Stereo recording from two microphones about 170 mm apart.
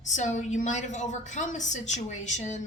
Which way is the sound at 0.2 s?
45° left (ahead or behind).